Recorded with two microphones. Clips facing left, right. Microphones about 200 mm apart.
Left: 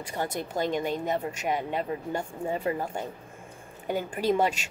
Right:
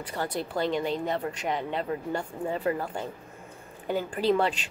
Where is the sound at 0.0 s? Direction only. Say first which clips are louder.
Even; 15° left (ahead or behind).